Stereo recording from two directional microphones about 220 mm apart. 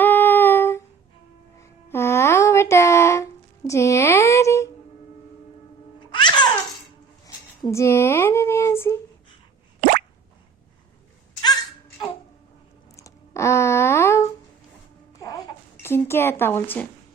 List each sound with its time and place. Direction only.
0.0 s humming: 10° left (ahead or behind)
1.6 s music: 10° left (ahead or behind)
3.7 s a woman's voice: 15° left (ahead or behind)
6.0 s music: 20° left (ahead or behind)
7.3 s a sound: 15° left (ahead or behind)
13.0 s a sound: 15° left (ahead or behind)